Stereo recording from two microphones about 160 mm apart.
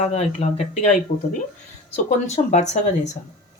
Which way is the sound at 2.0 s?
45° left (ahead or behind).